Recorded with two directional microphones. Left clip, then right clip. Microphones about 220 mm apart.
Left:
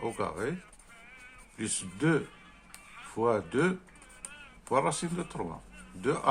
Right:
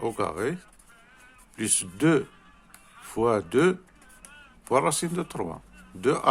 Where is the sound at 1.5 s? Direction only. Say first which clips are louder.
Right 6 dB; 50° right (ahead or behind).